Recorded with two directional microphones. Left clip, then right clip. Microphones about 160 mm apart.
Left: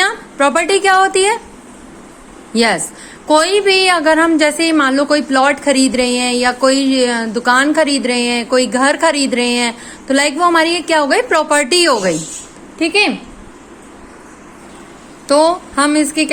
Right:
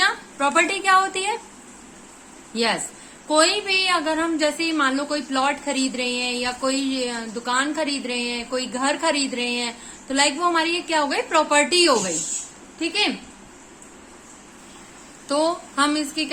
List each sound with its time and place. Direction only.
0.0 s a woman's voice: 40° left (ahead or behind)
2.5 s a woman's voice: 40° left (ahead or behind)
15.3 s a woman's voice: 35° left (ahead or behind)